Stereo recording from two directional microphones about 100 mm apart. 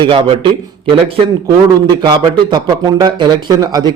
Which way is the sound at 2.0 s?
45° right (ahead or behind).